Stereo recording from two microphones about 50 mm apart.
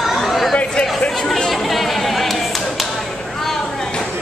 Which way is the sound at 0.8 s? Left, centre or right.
Centre.